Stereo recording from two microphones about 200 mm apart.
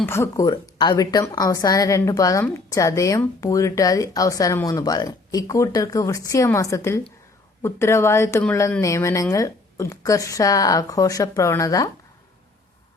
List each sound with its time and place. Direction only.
0.0 s a woman's voice: 10° left (ahead or behind)